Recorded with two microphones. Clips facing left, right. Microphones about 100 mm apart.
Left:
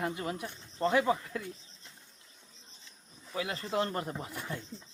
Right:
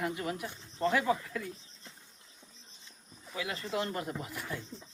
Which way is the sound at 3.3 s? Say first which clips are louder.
Left 2 dB; 35° left (ahead or behind).